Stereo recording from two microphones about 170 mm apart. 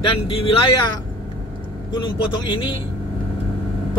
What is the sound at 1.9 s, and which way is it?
Speech, 30° left (ahead or behind).